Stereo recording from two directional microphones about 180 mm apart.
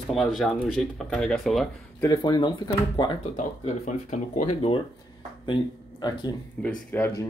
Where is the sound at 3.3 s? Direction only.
40° left (ahead or behind).